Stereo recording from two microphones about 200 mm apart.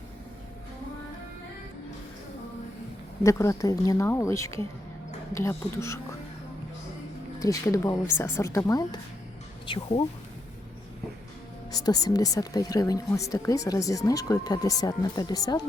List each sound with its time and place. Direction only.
3.2 s speech: 15° left (ahead or behind)
7.3 s speech: 15° left (ahead or behind)
11.7 s speech: 20° left (ahead or behind)